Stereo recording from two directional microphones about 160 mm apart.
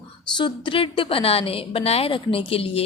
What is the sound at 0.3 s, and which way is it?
A woman's voice, 30° left (ahead or behind).